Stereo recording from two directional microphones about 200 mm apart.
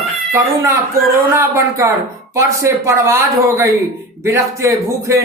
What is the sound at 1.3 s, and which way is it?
Speech, 10° right (ahead or behind).